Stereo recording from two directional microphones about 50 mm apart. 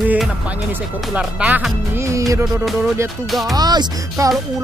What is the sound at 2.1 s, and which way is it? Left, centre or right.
Music, right.